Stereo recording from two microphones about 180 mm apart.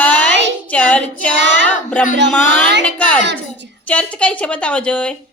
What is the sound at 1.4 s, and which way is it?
Child singing, 80° right.